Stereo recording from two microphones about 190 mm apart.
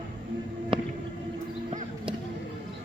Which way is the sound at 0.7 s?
25° right (ahead or behind).